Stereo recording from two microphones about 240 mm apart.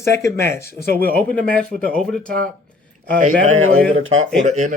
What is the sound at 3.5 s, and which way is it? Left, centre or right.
Speech, right.